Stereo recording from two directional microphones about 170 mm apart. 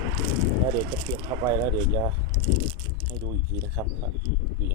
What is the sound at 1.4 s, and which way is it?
Speech, 25° right (ahead or behind).